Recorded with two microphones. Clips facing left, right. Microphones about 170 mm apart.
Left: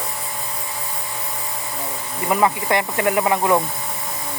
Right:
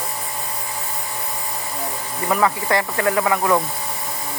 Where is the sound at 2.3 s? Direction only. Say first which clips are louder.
Left 1 dB; 20° left (ahead or behind).